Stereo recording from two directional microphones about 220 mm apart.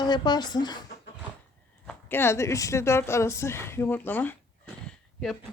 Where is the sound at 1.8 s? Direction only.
10° left (ahead or behind).